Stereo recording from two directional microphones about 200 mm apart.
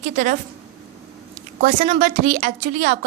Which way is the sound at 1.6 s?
40° right (ahead or behind).